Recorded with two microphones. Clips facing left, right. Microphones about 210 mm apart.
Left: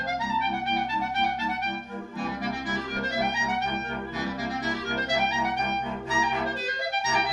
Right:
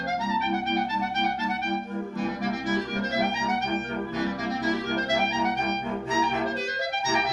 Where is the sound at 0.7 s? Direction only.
45° right (ahead or behind).